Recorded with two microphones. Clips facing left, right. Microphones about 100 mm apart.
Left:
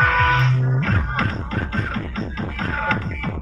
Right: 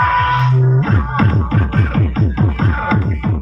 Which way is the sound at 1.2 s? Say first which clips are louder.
Right 8 dB; 45° right (ahead or behind).